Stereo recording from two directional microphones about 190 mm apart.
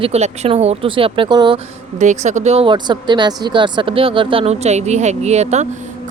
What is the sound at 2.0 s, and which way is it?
Speech, 40° right (ahead or behind).